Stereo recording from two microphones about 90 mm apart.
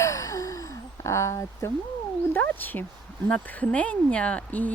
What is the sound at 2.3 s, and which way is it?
Speech, 20° left (ahead or behind).